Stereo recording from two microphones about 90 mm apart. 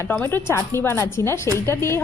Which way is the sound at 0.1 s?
20° left (ahead or behind).